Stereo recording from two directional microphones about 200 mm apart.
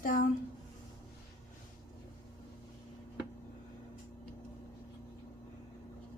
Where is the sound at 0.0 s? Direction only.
45° left (ahead or behind).